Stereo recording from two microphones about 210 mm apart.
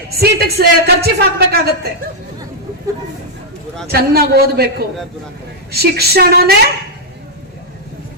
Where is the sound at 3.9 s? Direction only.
50° right (ahead or behind).